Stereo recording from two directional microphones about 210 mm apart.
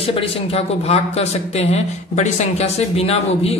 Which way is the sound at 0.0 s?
25° left (ahead or behind).